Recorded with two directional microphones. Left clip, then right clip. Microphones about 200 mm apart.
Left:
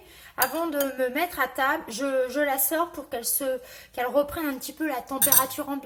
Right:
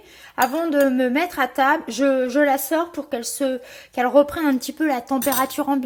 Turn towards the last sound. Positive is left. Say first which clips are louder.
# right 6 dB
turn(degrees=-40)  # may be behind; listen again after turning